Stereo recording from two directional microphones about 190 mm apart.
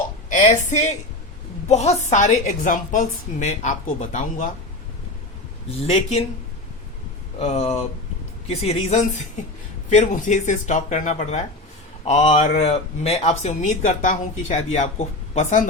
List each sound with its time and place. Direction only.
0.3 s speech: 40° left (ahead or behind)
5.8 s speech: 30° left (ahead or behind)
7.3 s speech: 35° left (ahead or behind)